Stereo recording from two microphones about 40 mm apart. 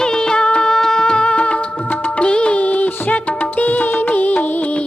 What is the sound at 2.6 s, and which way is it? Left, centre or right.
Music, left.